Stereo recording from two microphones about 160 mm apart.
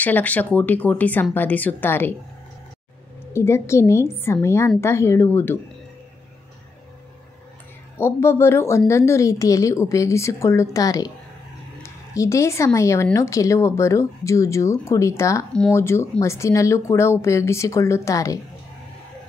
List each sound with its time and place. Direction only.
0.0 s a woman's voice: 10° left (ahead or behind)
3.3 s a woman's voice: 15° left (ahead or behind)
8.0 s a woman's voice: 15° left (ahead or behind)